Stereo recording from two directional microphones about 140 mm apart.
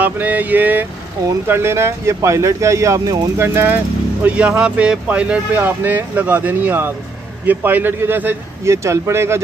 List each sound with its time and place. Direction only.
0.0 s speech: 10° right (ahead or behind)